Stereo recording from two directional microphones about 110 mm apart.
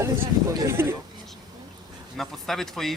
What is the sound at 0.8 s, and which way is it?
Speech, 20° right (ahead or behind).